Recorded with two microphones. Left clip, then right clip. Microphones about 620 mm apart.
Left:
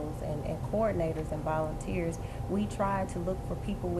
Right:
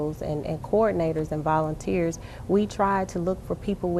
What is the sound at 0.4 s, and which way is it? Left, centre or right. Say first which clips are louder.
A woman's voice: right 8 dB; right.